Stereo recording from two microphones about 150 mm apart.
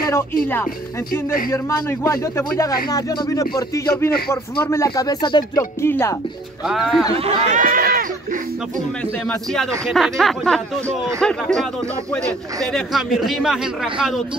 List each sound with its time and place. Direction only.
1.5 s speech: 20° left (ahead or behind)
5.8 s speech: 15° left (ahead or behind)
6.6 s speech: centre (ahead or behind)
7.2 s speech: 45° right (ahead or behind); by 8.4 s 70° right (ahead or behind)
9.2 s speech: 5° left (ahead or behind)
13.2 s speech: centre (ahead or behind)